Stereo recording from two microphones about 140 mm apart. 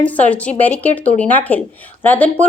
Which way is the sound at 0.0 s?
10° left (ahead or behind).